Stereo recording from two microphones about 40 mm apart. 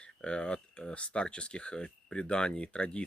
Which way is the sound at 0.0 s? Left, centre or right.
Left.